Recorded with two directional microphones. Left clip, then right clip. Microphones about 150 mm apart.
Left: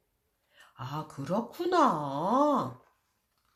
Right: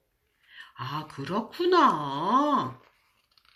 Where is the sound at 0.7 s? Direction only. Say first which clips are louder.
Right 4 dB; 55° left (ahead or behind).